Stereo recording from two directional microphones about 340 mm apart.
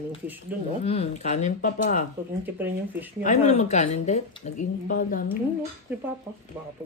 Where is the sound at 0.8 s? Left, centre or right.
Centre.